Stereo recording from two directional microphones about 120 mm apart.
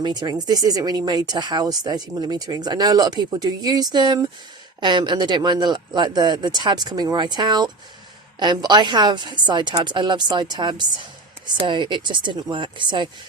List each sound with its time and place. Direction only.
0.0 s speech: 35° right (ahead or behind)